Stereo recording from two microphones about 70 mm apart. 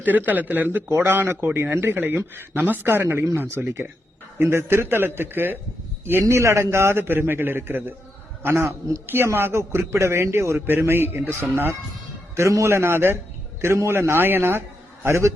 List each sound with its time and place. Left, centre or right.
0.0 s a man's voice: right
6.2 s a man's voice: right
12.4 s a man's voice: right